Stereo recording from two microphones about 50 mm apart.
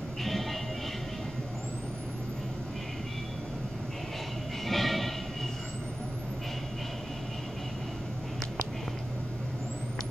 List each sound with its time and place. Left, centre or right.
0.2 s music: centre
4.6 s train: centre